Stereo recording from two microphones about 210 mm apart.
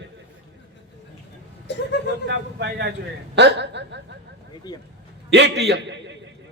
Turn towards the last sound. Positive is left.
turn(degrees=-55)  # may be behind; listen again after turning